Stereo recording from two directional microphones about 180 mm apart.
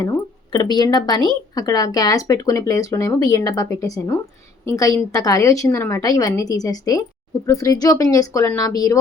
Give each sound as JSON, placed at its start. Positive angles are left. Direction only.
{"t": 0.0, "sound": "speech", "side_deg": 20}